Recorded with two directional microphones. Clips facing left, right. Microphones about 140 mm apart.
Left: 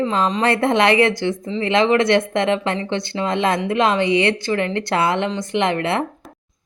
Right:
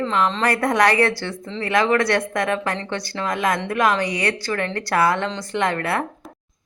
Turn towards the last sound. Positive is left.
turn(degrees=20)  # may be behind; listen again after turning